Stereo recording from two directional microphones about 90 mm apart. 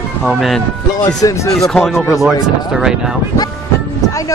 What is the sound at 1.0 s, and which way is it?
Speech, 40° left (ahead or behind).